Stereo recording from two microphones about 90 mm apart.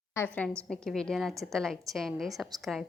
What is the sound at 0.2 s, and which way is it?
Speech, 30° left (ahead or behind).